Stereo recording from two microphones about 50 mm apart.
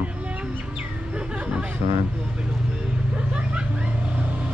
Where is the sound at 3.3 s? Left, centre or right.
Right.